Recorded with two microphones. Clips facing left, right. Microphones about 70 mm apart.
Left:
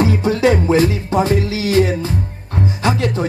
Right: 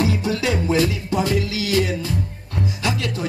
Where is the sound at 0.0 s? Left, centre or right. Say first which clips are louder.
Left 6 dB; left.